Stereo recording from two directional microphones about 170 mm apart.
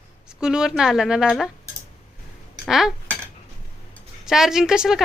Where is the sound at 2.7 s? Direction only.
Centre (ahead or behind).